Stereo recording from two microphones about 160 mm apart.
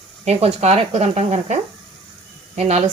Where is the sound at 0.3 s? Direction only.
40° right (ahead or behind).